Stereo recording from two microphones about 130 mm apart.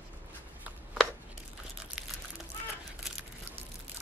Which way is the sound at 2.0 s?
Centre (ahead or behind).